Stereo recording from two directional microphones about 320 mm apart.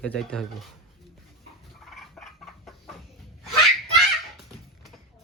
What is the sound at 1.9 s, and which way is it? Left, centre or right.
Chicken, centre.